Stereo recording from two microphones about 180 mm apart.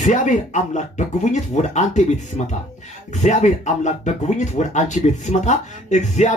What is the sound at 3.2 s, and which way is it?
Speech, 40° left (ahead or behind).